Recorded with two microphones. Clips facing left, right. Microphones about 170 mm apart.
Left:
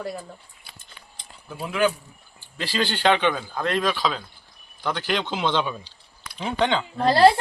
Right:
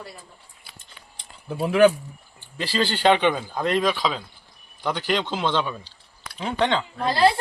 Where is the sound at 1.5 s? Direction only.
25° right (ahead or behind).